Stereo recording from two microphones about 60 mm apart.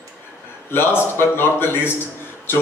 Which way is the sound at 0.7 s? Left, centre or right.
Left.